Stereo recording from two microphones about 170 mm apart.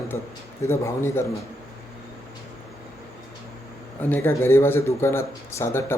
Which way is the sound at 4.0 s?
10° left (ahead or behind).